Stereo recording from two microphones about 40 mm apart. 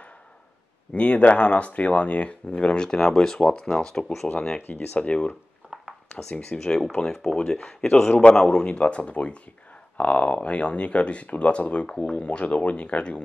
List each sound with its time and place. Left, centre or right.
0.9 s speech: left
3.6 s speech: centre
4.4 s speech: left
6.0 s a sound: centre
6.3 s speech: left
8.6 s speech: left